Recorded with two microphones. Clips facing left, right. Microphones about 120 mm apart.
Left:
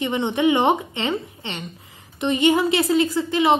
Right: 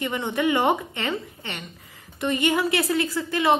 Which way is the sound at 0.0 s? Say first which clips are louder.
Left 4 dB; 20° left (ahead or behind).